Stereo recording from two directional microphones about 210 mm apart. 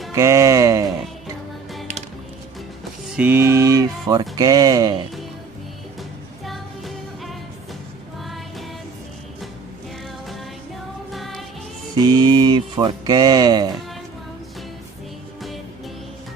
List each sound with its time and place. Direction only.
0.1 s speech: 15° right (ahead or behind)
3.2 s speech: 10° right (ahead or behind)
11.1 s music: centre (ahead or behind)
11.9 s speech: 20° right (ahead or behind)